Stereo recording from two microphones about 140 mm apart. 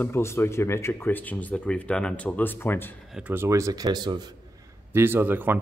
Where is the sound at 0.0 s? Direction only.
20° left (ahead or behind).